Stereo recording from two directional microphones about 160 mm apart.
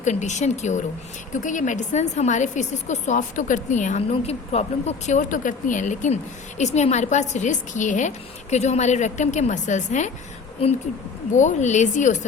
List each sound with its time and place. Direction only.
0.0 s speech: 45° left (ahead or behind)
11.3 s speech: 50° left (ahead or behind)